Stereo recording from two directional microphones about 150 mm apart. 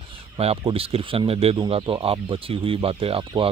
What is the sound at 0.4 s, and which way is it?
Speech, 40° right (ahead or behind).